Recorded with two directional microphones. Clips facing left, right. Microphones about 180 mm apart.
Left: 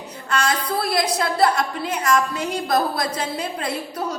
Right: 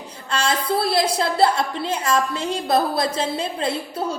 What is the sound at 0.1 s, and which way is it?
A woman's voice, 30° right (ahead or behind).